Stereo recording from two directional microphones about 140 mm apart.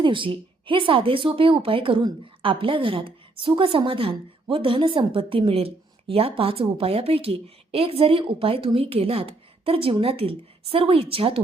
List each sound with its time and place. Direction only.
0.0 s speech: 35° right (ahead or behind)